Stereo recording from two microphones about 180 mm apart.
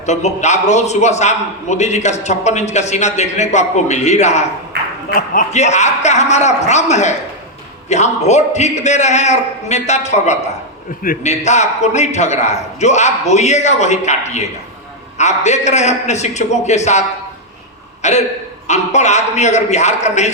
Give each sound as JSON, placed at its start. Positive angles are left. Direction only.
{"t": 0.0, "sound": "a man's voice", "side_deg": 40}